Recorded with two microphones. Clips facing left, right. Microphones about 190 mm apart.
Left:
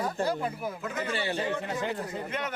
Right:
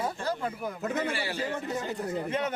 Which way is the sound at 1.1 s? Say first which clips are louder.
Left 3 dB; 25° left (ahead or behind).